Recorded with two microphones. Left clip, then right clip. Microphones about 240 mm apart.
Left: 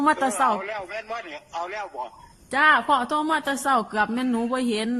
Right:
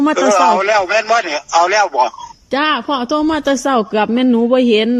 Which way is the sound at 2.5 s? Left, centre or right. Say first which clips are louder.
Right 3 dB; centre.